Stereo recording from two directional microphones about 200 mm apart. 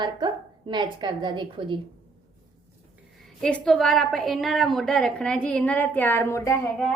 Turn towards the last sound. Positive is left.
turn(degrees=10)  # may be behind; listen again after turning